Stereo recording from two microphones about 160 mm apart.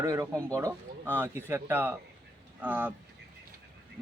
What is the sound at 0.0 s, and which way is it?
A man's voice, 20° right (ahead or behind).